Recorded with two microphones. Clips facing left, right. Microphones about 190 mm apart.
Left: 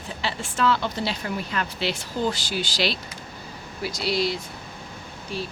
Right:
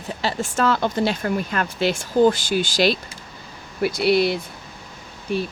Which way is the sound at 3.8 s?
60° right (ahead or behind).